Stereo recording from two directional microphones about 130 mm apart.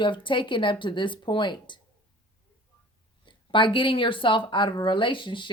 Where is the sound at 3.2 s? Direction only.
40° left (ahead or behind).